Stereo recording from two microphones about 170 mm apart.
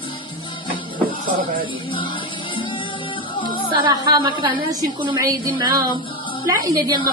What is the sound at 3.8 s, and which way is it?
A woman's voice, 30° right (ahead or behind).